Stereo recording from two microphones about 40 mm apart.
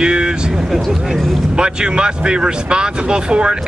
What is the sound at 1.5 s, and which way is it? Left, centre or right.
Speech, right.